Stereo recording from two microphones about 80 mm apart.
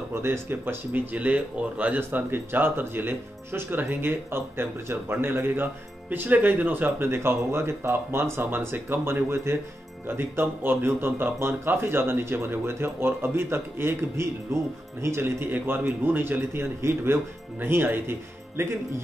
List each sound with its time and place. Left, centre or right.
0.1 s speech: right